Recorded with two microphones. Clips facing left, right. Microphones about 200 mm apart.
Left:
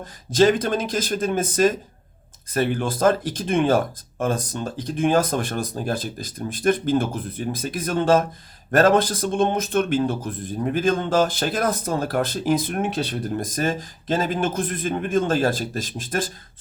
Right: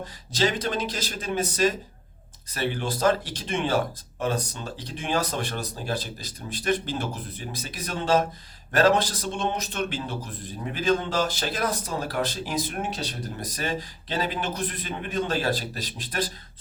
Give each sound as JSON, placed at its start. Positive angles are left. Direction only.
{"t": 0.0, "sound": "speech", "side_deg": 50}